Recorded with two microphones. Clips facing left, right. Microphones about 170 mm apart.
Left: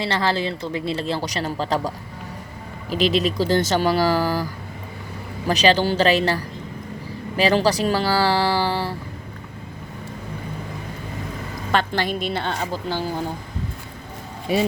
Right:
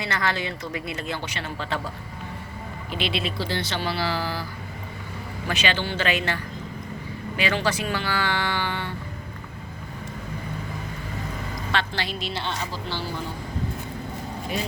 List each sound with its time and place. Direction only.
0.0 s speech: 30° left (ahead or behind)
2.9 s speech: 40° left (ahead or behind)
5.5 s speech: 35° left (ahead or behind)
11.7 s speech: 50° left (ahead or behind)